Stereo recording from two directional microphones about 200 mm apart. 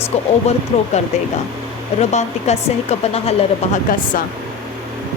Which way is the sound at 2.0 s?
35° left (ahead or behind).